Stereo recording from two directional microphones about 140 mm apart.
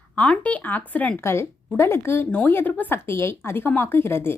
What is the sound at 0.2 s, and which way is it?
Speech, 10° left (ahead or behind).